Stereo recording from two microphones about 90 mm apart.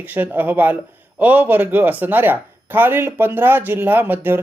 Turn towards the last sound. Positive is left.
turn(degrees=-25)  # may be behind; listen again after turning